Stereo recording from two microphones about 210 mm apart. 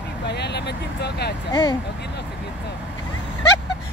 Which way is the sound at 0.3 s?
55° left (ahead or behind).